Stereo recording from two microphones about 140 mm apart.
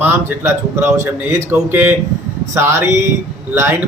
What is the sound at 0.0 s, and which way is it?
A man's voice, 20° right (ahead or behind).